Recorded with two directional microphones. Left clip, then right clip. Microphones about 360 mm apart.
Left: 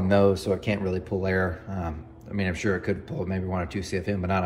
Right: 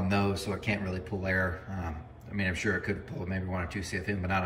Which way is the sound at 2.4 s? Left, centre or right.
Centre.